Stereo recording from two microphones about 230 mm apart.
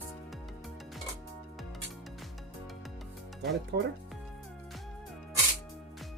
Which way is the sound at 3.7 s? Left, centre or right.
Right.